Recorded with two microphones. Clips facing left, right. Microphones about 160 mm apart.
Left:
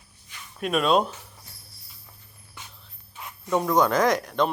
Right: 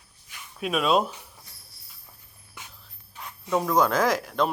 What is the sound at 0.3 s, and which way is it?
Speech, centre (ahead or behind).